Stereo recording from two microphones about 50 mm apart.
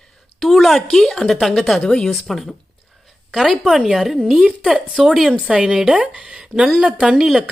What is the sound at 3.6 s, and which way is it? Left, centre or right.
A woman's voice, centre.